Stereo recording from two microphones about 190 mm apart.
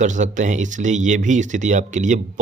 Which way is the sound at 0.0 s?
40° right (ahead or behind).